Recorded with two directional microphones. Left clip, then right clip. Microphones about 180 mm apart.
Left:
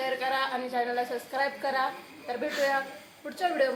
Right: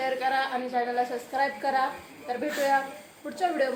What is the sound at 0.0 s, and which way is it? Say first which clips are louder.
A woman's voice: right 2 dB; centre (ahead or behind).